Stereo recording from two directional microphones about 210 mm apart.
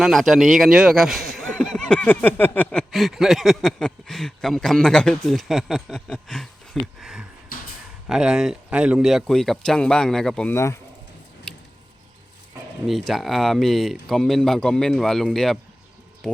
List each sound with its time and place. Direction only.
0.0 s speech: centre (ahead or behind)
11.5 s a sound: 5° left (ahead or behind)
12.9 s speech: centre (ahead or behind)